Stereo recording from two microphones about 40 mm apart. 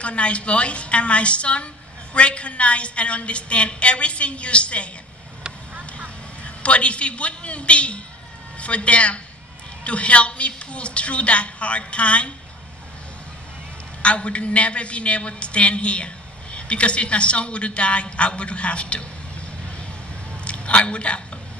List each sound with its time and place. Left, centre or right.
0.0 s a woman's voice: left
6.4 s a woman's voice: left
14.0 s a woman's voice: left
20.4 s a sound: left